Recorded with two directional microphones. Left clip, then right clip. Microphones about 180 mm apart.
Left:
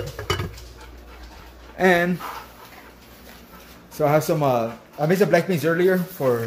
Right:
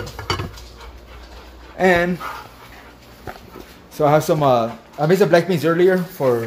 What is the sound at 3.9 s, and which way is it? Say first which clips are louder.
Speech: right 4 dB; 15° right (ahead or behind).